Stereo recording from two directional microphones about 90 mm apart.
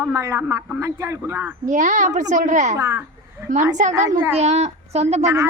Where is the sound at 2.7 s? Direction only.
35° right (ahead or behind).